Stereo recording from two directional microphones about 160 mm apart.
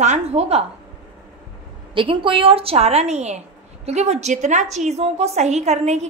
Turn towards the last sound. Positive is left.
turn(degrees=-45)  # may be behind; listen again after turning